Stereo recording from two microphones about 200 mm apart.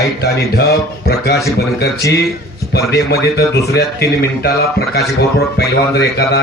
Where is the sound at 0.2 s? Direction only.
55° left (ahead or behind).